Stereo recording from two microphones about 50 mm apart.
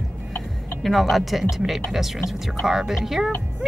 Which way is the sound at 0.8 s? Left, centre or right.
Centre.